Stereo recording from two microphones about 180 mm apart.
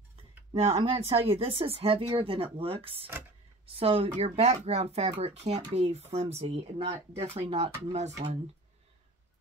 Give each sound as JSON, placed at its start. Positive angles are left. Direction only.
{"t": 0.5, "sound": "speech", "side_deg": -30}